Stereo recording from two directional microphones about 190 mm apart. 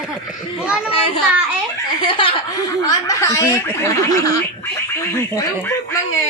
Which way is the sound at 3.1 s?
15° left (ahead or behind).